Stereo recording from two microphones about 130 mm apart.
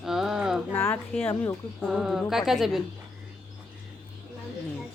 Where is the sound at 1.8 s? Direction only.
5° right (ahead or behind).